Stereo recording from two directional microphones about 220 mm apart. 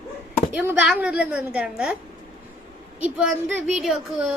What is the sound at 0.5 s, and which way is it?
Child singing, 5° right (ahead or behind).